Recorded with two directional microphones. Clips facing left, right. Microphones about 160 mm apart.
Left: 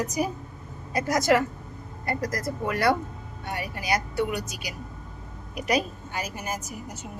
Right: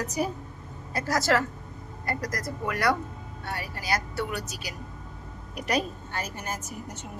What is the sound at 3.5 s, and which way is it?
A woman's voice, 15° left (ahead or behind).